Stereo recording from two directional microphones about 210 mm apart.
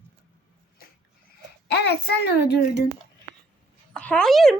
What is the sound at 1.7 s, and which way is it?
A child's voice, 50° left (ahead or behind).